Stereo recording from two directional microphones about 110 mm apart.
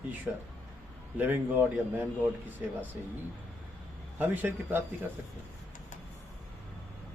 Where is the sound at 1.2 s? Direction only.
20° right (ahead or behind).